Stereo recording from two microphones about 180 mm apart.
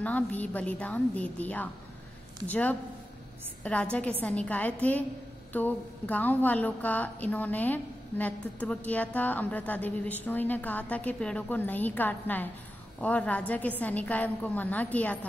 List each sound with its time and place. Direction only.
0.0 s a woman's voice: 10° left (ahead or behind)